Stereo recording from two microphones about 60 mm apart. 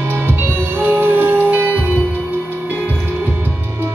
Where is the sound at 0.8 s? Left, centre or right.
Right.